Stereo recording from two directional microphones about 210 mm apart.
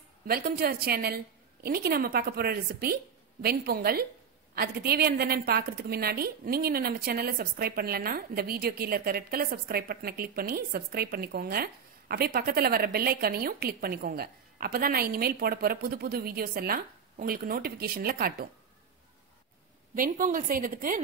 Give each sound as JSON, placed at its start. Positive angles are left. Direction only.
{"t": 0.3, "sound": "a woman's voice", "side_deg": -45}
{"t": 20.0, "sound": "a woman's voice", "side_deg": -40}